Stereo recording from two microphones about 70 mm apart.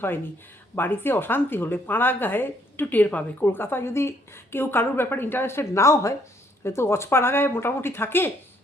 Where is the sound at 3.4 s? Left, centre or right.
Left.